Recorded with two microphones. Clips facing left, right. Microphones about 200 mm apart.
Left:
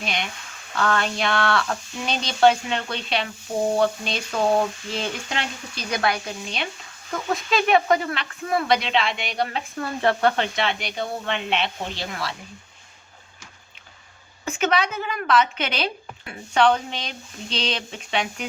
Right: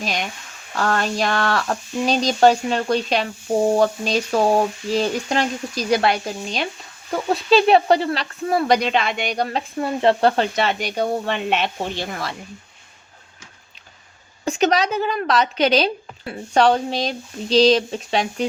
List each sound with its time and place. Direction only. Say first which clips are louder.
0.0 s speech: right 3 dB; 40° right (ahead or behind)
9.7 s speech: right 5 dB; 25° right (ahead or behind); by 12.3 s 50° right (ahead or behind)
14.4 s speech: right 4 dB; 35° right (ahead or behind)